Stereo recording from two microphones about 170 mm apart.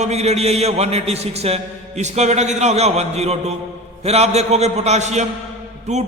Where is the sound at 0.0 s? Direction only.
40° right (ahead or behind).